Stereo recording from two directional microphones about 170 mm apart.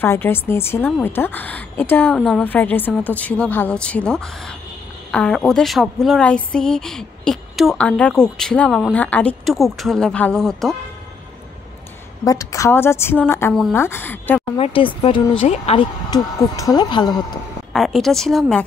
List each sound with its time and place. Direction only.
0.0 s a woman's voice: 15° left (ahead or behind)
12.3 s a woman's voice: 20° left (ahead or behind)
14.6 s speech: 30° left (ahead or behind)
16.1 s speech: 20° left (ahead or behind)
17.7 s a woman's voice: centre (ahead or behind)